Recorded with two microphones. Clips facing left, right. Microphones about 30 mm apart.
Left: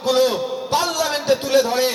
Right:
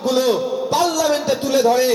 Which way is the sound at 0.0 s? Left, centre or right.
Left.